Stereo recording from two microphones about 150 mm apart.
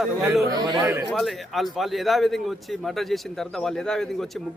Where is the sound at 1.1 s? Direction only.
Centre (ahead or behind).